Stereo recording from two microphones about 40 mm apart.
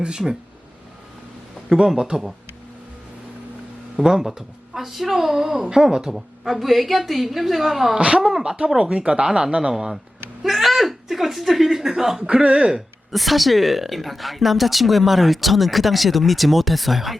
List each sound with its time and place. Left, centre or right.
0.0 s speech: right
2.0 s speech: centre
3.9 s speech: centre
6.1 s speech: centre
7.9 s speech: right
10.4 s speech: centre
12.3 s speech: right
13.1 s speech: centre